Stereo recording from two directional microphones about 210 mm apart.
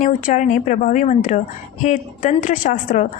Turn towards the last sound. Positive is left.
turn(degrees=40)  # may be behind; listen again after turning